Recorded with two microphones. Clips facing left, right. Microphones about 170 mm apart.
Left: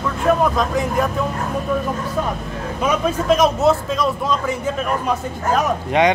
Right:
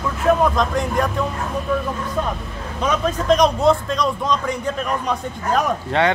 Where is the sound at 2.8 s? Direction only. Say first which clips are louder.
Left 1 dB; 10° left (ahead or behind).